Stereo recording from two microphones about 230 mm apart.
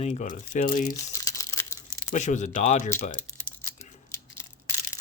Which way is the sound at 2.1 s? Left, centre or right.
Left.